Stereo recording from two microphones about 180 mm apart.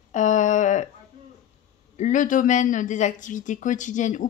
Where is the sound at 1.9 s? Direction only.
45° left (ahead or behind).